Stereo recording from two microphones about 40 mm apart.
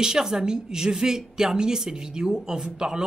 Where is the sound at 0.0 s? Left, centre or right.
Centre.